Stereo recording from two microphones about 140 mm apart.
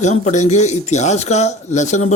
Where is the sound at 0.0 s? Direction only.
55° left (ahead or behind).